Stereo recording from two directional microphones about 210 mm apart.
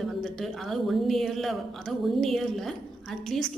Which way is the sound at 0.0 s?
Centre (ahead or behind).